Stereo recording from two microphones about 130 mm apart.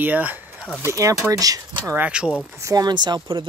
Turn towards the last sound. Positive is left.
turn(degrees=-35)  # may be behind; listen again after turning